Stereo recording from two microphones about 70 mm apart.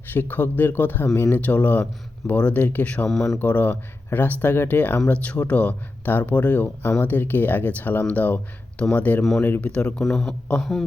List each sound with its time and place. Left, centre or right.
0.1 s speech: left
1.4 s speech: left
3.1 s speech: centre
3.3 s speech: left
9.6 s speech: centre
10.0 s a man's voice: centre